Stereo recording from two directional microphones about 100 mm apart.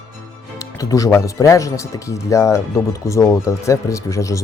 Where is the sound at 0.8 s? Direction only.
35° left (ahead or behind).